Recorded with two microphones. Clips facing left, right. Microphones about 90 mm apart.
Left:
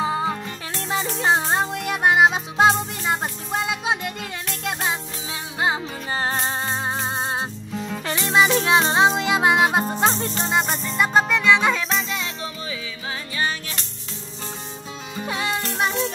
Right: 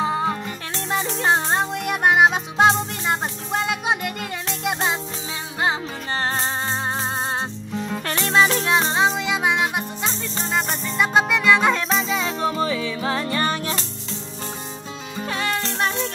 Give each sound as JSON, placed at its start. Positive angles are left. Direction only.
{"t": 0.0, "sound": "music", "side_deg": 0}
{"t": 5.6, "sound": "music", "side_deg": 5}
{"t": 7.7, "sound": "music", "side_deg": 0}
{"t": 9.5, "sound": "music", "side_deg": 30}
{"t": 10.3, "sound": "music", "side_deg": 0}
{"t": 12.3, "sound": "music", "side_deg": -45}
{"t": 15.1, "sound": "music", "side_deg": 10}